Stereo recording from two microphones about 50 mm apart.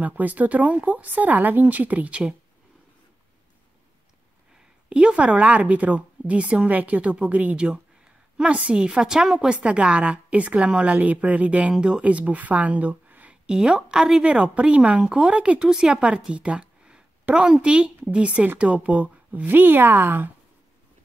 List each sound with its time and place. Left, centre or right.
0.0 s speech: right
4.8 s a woman's voice: right
9.5 s a woman's voice: right
12.0 s speech: right
13.3 s a woman's voice: centre
14.2 s a woman's voice: right
15.6 s speech: centre
15.9 s a woman's voice: right
19.4 s speech: right